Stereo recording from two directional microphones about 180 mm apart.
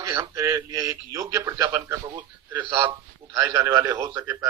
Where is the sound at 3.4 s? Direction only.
15° right (ahead or behind).